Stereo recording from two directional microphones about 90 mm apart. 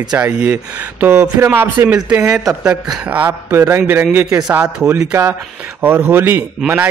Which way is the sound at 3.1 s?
25° right (ahead or behind).